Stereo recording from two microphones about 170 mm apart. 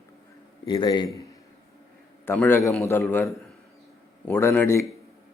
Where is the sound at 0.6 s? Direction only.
25° left (ahead or behind).